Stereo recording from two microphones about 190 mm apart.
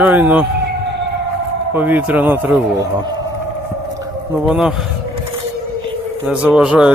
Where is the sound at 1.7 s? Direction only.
10° right (ahead or behind).